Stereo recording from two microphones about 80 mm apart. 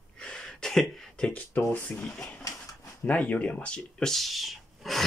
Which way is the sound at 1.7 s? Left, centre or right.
Left.